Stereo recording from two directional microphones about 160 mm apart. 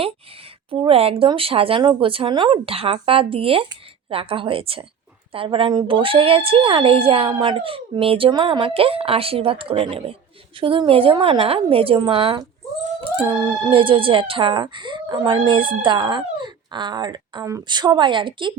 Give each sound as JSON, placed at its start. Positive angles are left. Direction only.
{"t": 0.7, "sound": "speech", "side_deg": -35}